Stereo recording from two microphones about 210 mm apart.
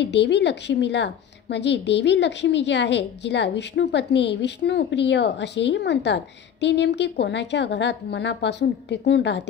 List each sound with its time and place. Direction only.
0.0 s a woman's voice: 55° left (ahead or behind)